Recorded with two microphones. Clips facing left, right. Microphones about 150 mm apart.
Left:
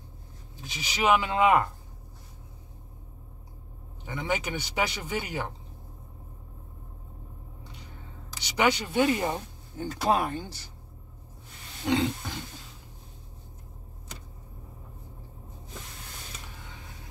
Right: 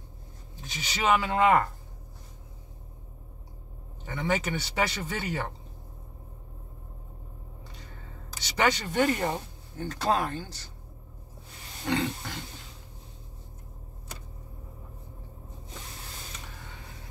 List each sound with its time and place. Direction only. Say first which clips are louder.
0.7 s speech: left 1 dB; 10° left (ahead or behind)
4.0 s speech: right 1 dB; 15° left (ahead or behind)
8.4 s speech: left 1 dB; 15° left (ahead or behind)
11.8 s roaring cats: left 3 dB; 15° left (ahead or behind)